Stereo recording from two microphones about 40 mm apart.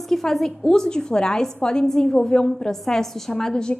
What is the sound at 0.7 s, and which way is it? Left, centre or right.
A woman's voice, centre.